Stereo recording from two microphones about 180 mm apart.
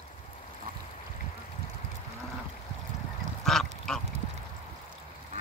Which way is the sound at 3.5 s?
Centre (ahead or behind).